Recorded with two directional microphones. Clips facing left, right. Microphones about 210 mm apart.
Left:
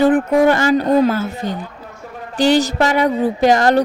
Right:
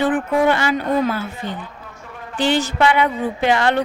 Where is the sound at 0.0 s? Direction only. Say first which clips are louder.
Left 5 dB; 40° left (ahead or behind).